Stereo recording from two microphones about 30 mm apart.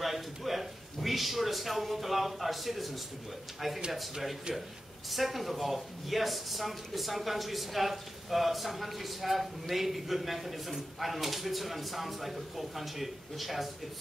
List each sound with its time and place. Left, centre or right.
0.0 s a man's voice: centre